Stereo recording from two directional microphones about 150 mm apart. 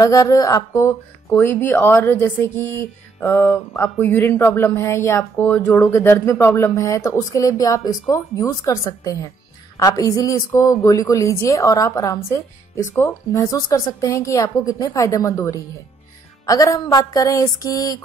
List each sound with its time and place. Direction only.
0.0 s a woman's voice: 25° left (ahead or behind)